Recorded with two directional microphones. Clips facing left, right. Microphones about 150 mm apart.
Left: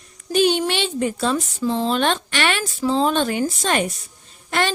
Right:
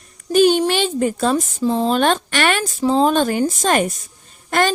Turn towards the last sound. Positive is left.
turn(degrees=-45)  # may be behind; listen again after turning